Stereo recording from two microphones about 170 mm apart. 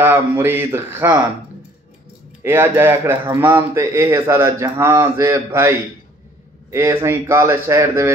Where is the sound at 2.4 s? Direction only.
15° right (ahead or behind).